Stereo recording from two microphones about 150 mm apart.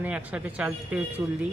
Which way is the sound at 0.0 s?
10° right (ahead or behind).